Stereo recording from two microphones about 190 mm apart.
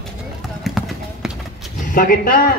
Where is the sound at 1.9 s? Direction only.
45° left (ahead or behind).